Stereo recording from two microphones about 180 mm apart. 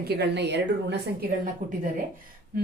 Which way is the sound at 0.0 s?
65° right (ahead or behind).